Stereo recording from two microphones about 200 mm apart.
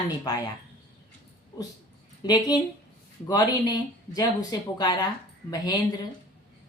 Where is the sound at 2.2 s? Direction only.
20° left (ahead or behind).